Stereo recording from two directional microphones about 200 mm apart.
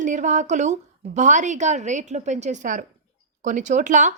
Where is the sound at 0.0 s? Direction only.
40° right (ahead or behind).